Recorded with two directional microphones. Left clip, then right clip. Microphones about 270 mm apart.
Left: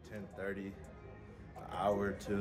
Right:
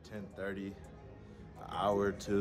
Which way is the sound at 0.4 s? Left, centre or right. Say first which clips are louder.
Right 1 dB; centre.